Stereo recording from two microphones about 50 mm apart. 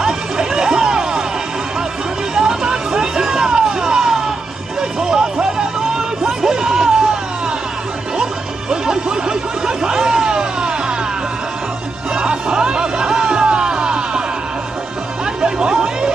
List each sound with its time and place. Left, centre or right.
0.0 s chatter: centre
2.3 s music: centre
8.2 s music: centre
12.2 s music: centre
15.4 s a sound: centre